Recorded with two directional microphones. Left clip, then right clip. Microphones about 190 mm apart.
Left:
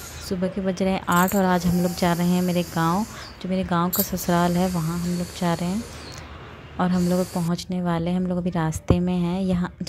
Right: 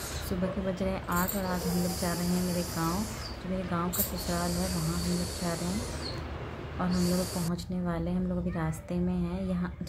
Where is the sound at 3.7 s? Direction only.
50° left (ahead or behind).